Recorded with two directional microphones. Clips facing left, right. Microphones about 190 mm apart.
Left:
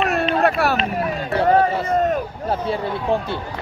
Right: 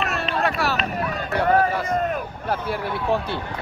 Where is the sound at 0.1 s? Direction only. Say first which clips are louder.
Left 6 dB; 55° left (ahead or behind).